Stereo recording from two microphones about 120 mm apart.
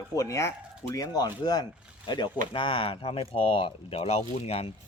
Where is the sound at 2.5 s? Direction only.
45° left (ahead or behind).